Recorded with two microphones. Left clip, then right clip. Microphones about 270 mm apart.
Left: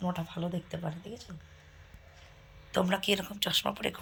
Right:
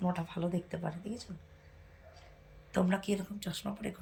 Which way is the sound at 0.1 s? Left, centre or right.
Left.